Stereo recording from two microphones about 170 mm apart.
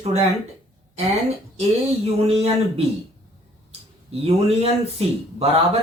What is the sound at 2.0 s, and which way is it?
Speech, 35° right (ahead or behind).